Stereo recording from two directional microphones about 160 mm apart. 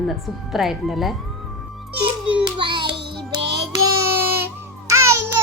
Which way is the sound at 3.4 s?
90° right.